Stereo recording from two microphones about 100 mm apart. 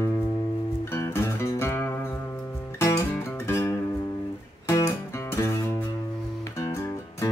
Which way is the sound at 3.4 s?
25° left (ahead or behind).